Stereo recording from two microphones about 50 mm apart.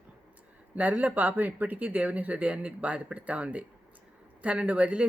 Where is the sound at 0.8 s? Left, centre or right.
Right.